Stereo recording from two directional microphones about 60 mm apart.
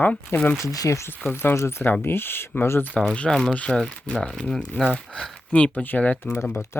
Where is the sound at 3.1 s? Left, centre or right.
Centre.